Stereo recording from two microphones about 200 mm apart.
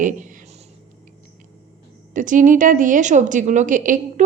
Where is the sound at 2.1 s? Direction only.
40° right (ahead or behind).